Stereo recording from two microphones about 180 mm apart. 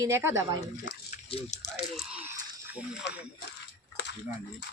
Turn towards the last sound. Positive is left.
turn(degrees=70)  # may be behind; listen again after turning